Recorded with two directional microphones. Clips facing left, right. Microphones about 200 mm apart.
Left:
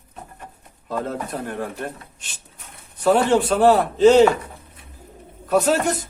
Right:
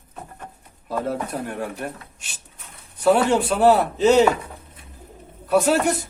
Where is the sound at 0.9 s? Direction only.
10° right (ahead or behind).